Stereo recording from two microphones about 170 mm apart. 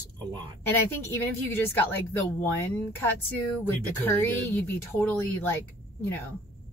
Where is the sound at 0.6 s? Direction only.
10° left (ahead or behind).